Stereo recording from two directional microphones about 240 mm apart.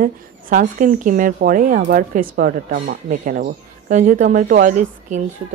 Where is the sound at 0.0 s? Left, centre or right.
Right.